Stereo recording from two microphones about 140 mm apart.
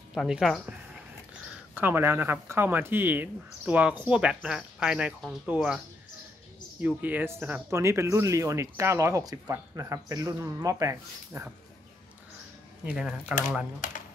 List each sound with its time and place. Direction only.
0.1 s speech: 5° right (ahead or behind)
1.8 s speech: 15° right (ahead or behind)
6.8 s speech: 10° right (ahead or behind)
12.8 s speech: 5° right (ahead or behind)